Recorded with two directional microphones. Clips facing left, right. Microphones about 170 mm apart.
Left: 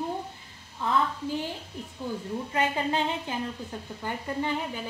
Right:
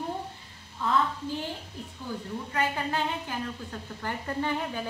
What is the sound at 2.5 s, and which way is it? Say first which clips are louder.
A woman's voice: left 2 dB; 20° left (ahead or behind).